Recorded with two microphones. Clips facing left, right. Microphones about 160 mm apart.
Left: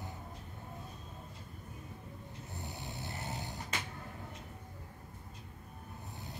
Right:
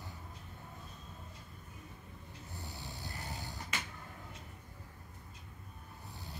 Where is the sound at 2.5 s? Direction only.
20° left (ahead or behind).